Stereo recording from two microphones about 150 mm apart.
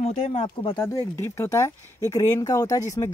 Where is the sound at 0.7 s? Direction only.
20° left (ahead or behind).